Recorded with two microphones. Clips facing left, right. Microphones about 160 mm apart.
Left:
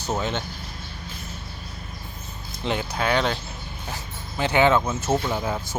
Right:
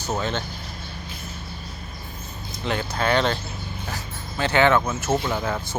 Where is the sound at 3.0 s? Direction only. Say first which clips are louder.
Right 2 dB; 5° left (ahead or behind).